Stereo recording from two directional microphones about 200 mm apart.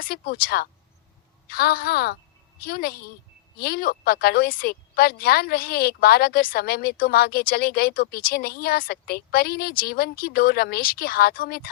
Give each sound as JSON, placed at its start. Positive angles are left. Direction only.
{"t": 0.0, "sound": "a woman's voice", "side_deg": 50}